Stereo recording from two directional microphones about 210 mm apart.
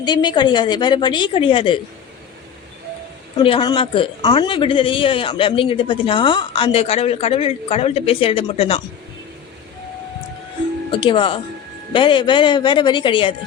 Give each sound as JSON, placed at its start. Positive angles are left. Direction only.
{"t": 0.0, "sound": "speech", "side_deg": 20}
{"t": 3.3, "sound": "speech", "side_deg": 25}
{"t": 10.9, "sound": "speech", "side_deg": 25}